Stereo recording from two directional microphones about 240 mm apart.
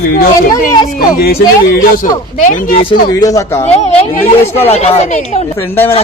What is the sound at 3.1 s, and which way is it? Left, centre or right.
Speech, centre.